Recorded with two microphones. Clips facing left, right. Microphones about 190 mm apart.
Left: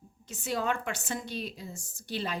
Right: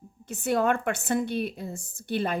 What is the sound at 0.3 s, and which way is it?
Speech, 60° right (ahead or behind).